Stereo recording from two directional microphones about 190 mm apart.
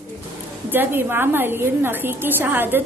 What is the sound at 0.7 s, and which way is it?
A woman's voice, 10° right (ahead or behind).